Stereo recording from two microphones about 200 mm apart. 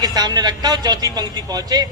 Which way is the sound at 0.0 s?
20° right (ahead or behind).